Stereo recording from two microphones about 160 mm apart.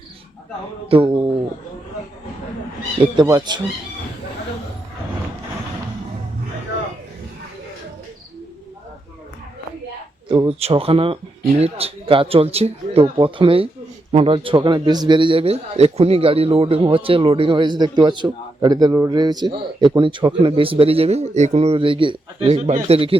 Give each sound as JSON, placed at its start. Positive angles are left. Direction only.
{"t": 0.9, "sound": "a sound", "side_deg": -30}
{"t": 3.2, "sound": "speech", "side_deg": -25}
{"t": 10.2, "sound": "a man's voice", "side_deg": -30}